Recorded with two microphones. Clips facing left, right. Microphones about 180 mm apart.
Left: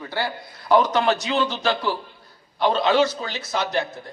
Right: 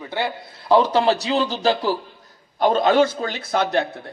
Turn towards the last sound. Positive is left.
turn(degrees=-55)  # may be behind; listen again after turning